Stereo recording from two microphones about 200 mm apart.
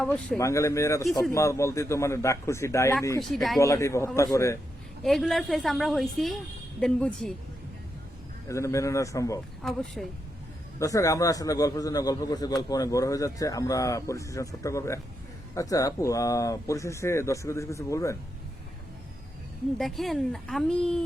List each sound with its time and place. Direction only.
0.0 s a man's voice: 5° left (ahead or behind)
3.2 s a woman's voice: centre (ahead or behind)
3.6 s a man's voice: 15° left (ahead or behind)
5.0 s a woman's voice: centre (ahead or behind)
8.4 s a man's voice: 15° left (ahead or behind)
9.6 s a woman's voice: centre (ahead or behind)
10.8 s a man's voice: 15° left (ahead or behind)
19.8 s a woman's voice: centre (ahead or behind)